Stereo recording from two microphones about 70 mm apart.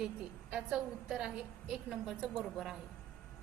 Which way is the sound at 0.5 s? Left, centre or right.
Centre.